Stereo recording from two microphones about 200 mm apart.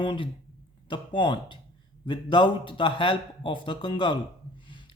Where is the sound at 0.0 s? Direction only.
25° left (ahead or behind).